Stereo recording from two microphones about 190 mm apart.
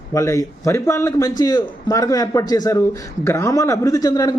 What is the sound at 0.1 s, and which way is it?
A man's voice, 15° left (ahead or behind).